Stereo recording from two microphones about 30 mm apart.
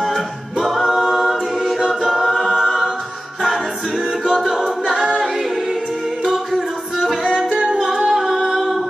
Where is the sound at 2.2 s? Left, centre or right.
Centre.